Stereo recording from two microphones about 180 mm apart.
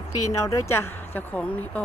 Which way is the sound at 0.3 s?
15° left (ahead or behind).